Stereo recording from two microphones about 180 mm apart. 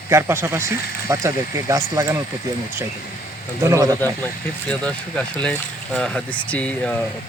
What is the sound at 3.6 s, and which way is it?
Speech, 15° right (ahead or behind).